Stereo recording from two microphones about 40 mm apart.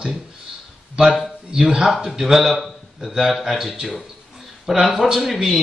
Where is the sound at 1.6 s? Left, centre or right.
Right.